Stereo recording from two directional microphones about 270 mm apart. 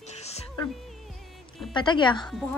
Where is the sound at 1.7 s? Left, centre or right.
Centre.